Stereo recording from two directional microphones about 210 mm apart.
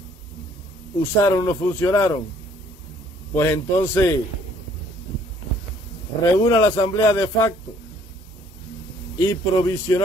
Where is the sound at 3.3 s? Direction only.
10° left (ahead or behind).